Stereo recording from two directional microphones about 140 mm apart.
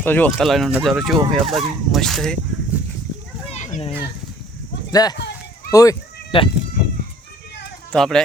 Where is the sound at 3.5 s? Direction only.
60° left (ahead or behind).